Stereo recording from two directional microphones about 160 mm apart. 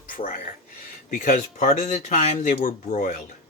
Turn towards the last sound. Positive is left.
turn(degrees=55)  # may be behind; listen again after turning